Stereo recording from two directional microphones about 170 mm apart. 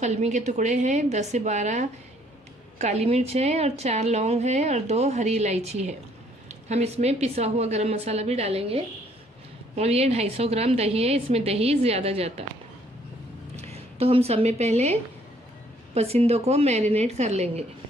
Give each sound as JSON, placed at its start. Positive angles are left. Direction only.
{"t": 0.0, "sound": "a woman's voice", "side_deg": -45}
{"t": 13.6, "sound": "a woman's voice", "side_deg": -40}